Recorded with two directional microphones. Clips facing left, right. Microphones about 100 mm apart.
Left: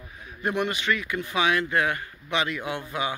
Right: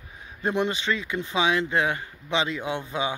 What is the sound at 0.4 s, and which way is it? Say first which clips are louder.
Speech: right 1 dB; 25° right (ahead or behind).